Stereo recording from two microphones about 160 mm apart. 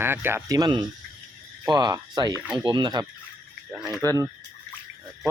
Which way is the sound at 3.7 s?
Centre (ahead or behind).